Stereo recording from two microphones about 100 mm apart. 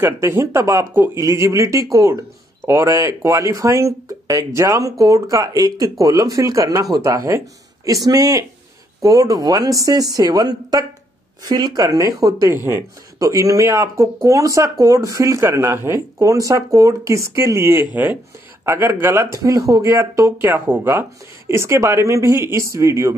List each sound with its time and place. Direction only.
0.0 s speech: 25° right (ahead or behind)
12.4 s speech: 25° right (ahead or behind)